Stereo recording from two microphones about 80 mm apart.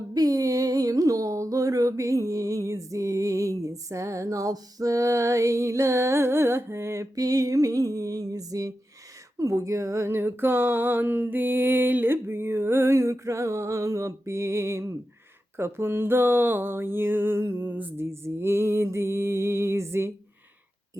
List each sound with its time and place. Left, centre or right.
0.1 s music: right